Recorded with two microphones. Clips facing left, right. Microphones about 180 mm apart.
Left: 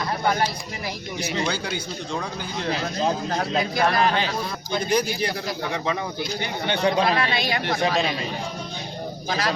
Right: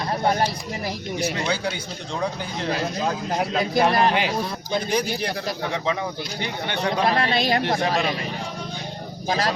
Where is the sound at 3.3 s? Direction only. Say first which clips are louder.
Right 2 dB; 15° right (ahead or behind).